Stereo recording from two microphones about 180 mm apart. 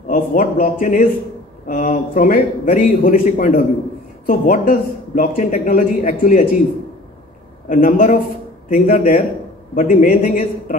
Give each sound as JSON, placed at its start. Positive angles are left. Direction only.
{"t": 0.1, "sound": "speech", "side_deg": 45}
{"t": 7.6, "sound": "speech", "side_deg": 45}